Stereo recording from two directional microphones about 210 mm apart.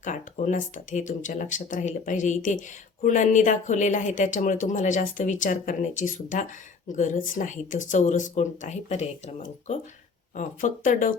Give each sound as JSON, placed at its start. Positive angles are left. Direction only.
{"t": 0.0, "sound": "speech", "side_deg": 35}